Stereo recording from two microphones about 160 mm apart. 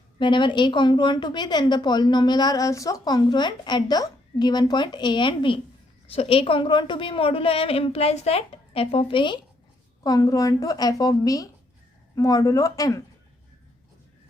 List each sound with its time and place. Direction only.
0.2 s a woman's voice: 30° left (ahead or behind)